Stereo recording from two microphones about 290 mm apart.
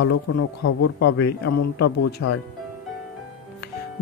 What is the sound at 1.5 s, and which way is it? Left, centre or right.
Speech, left.